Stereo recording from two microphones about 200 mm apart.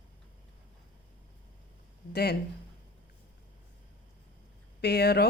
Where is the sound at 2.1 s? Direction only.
50° left (ahead or behind).